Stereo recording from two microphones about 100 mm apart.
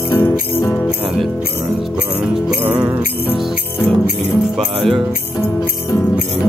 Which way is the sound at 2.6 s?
15° right (ahead or behind).